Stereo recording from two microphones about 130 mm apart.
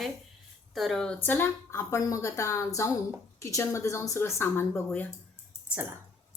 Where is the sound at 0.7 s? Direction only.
Centre (ahead or behind); by 5.0 s 15° left (ahead or behind).